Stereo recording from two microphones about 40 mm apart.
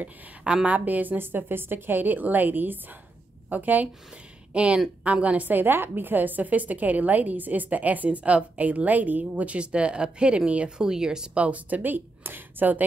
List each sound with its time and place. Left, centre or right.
0.4 s a woman's voice: centre
0.7 s a woman's voice: right
4.5 s a woman's voice: right
5.5 s a woman's voice: right
9.6 s speech: right
10.8 s speech: centre
11.3 s a woman's voice: right
11.8 s speech: right